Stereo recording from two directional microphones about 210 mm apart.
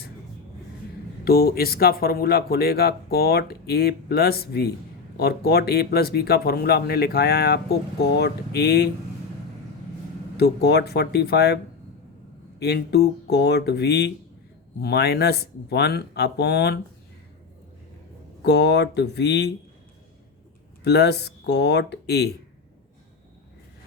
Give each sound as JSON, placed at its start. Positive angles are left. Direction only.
{"t": 1.2, "sound": "speech", "side_deg": 45}
{"t": 10.3, "sound": "speech", "side_deg": 50}
{"t": 18.4, "sound": "speech", "side_deg": 55}
{"t": 20.8, "sound": "speech", "side_deg": 50}